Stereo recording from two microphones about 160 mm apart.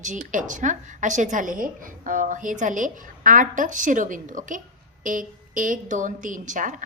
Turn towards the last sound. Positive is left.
turn(degrees=-55)  # may be behind; listen again after turning